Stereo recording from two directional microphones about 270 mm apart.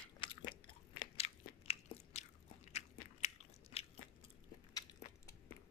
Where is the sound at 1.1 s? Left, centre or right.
Left.